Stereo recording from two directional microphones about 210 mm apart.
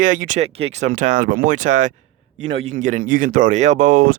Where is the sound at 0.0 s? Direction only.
40° right (ahead or behind).